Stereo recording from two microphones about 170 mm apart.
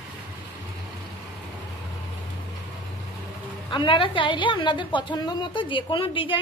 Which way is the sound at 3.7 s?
30° left (ahead or behind).